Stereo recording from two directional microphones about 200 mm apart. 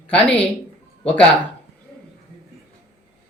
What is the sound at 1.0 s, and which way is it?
Speech, 5° left (ahead or behind).